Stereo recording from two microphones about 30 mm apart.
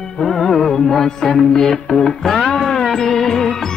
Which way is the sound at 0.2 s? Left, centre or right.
Centre.